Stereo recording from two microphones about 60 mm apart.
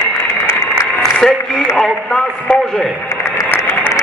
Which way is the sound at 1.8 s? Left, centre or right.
Centre.